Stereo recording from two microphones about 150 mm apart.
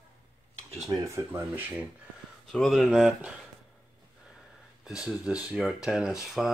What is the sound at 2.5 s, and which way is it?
Speech, centre (ahead or behind).